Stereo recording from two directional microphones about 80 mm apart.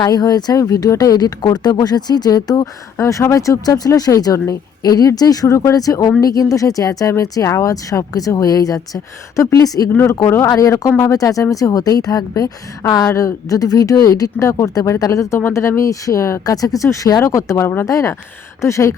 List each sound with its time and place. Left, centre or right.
0.0 s speech: left
3.0 s speech: left
10.2 s speech: left
10.5 s speech: left